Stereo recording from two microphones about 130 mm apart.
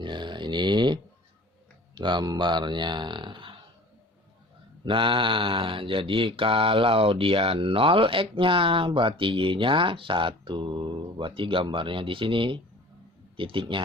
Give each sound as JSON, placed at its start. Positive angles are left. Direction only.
{"t": 0.0, "sound": "a sound", "side_deg": -35}
{"t": 2.0, "sound": "mantra", "side_deg": -35}
{"t": 4.9, "sound": "mantra", "side_deg": -40}